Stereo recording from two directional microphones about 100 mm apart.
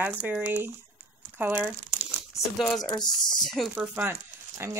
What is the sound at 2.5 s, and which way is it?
Speech, centre (ahead or behind).